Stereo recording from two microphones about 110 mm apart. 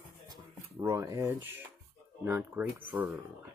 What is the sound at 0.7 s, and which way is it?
Speech, 30° right (ahead or behind).